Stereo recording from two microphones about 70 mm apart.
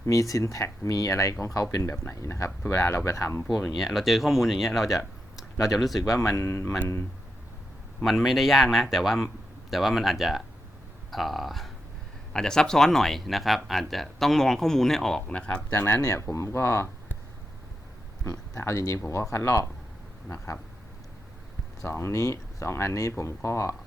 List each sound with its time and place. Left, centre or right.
0.0 s speech: left
3.8 s speech: centre
6.1 s speech: left
8.0 s speech: centre
15.3 s speech: centre
16.0 s speech: left
16.2 s speech: left
18.3 s speech: left
21.8 s speech: left